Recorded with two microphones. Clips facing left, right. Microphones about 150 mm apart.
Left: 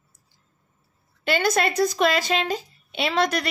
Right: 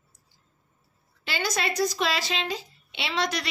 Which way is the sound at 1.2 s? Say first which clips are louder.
Left 7 dB; 55° left (ahead or behind).